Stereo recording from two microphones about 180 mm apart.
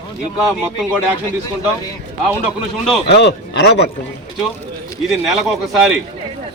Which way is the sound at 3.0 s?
70° left (ahead or behind).